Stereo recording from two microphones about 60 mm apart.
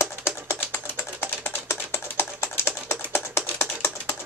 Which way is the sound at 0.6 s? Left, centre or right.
Left.